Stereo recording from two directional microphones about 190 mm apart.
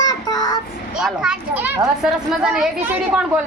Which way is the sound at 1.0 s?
5° right (ahead or behind).